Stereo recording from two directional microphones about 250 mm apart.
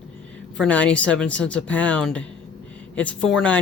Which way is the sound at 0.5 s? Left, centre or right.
Centre.